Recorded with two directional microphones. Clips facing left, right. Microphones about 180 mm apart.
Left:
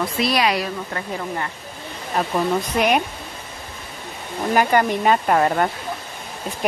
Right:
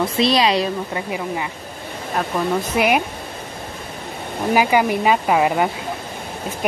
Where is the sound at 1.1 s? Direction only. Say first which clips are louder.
Even; 10° right (ahead or behind).